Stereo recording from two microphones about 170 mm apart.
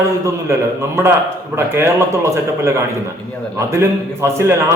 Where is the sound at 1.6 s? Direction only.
15° right (ahead or behind).